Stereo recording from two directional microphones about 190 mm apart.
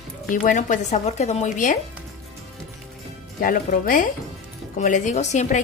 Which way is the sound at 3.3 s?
45° left (ahead or behind).